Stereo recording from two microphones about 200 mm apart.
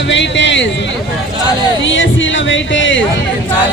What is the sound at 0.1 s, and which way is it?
Speech, 65° left (ahead or behind).